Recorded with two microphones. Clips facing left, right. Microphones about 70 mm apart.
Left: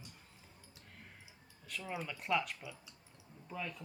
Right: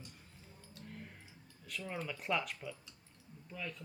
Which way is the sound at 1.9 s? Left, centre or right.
Centre.